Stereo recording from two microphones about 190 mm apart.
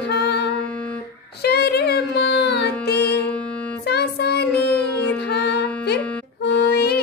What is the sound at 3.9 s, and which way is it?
Child singing, 60° left (ahead or behind).